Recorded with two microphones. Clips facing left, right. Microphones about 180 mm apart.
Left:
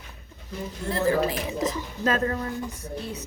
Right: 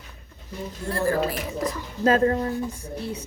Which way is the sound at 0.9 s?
20° left (ahead or behind).